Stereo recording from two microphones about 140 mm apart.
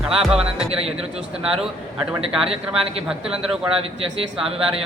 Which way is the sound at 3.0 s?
5° right (ahead or behind).